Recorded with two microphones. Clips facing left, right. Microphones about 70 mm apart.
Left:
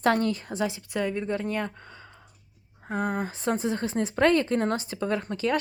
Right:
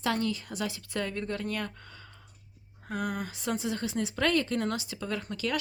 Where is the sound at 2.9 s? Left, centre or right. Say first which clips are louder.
Left 5 dB; left.